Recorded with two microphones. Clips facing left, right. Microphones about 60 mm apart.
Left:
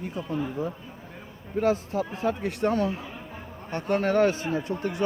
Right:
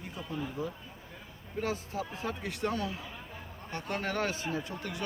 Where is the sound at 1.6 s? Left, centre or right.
Left.